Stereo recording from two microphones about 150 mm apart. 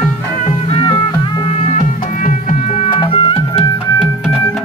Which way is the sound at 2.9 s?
35° left (ahead or behind).